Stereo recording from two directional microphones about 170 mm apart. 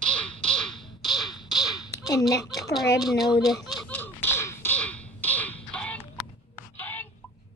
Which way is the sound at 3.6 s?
Centre (ahead or behind).